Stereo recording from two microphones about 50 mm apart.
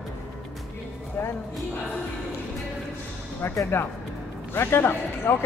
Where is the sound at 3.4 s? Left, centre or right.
Left.